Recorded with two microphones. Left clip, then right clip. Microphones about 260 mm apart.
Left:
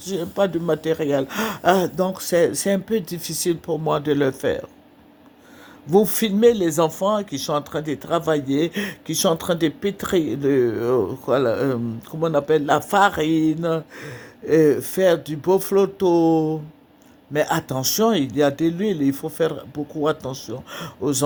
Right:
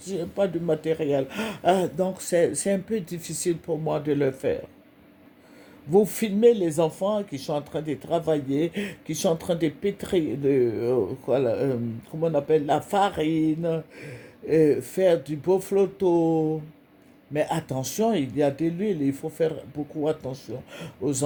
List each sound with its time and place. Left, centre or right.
0.0 s speech: left
5.9 s speech: centre
20.3 s speech: left